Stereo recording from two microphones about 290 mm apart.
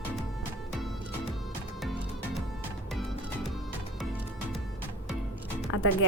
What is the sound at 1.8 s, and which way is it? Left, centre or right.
Music, centre.